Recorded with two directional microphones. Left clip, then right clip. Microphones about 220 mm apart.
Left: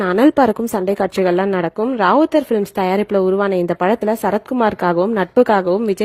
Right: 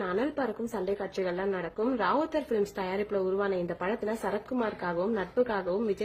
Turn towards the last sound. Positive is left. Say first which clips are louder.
# left 15 dB
turn(degrees=45)  # may be behind; listen again after turning